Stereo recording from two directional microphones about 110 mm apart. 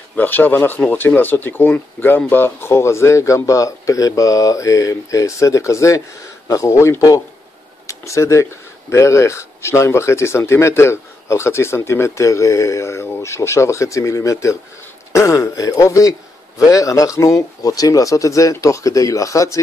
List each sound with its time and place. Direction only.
0.1 s speech: 15° left (ahead or behind)